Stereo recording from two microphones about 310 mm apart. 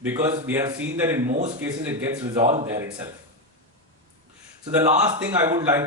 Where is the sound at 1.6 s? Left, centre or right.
Centre.